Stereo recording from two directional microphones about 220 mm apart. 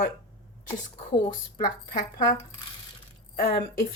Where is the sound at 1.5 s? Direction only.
40° left (ahead or behind).